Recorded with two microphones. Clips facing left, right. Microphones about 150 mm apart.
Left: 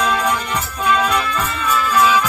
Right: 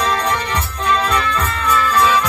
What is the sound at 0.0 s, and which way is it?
Music, 10° left (ahead or behind).